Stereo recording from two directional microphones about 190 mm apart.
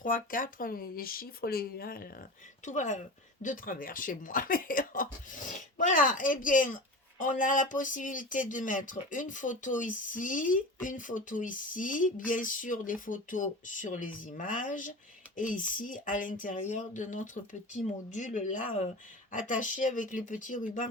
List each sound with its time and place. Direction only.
0.0 s speech: 45° left (ahead or behind)
2.6 s speech: 40° left (ahead or behind)